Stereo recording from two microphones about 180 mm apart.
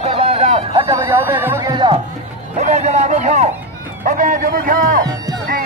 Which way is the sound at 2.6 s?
40° right (ahead or behind).